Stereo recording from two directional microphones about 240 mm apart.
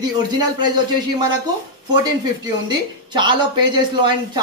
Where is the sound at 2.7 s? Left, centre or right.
Centre.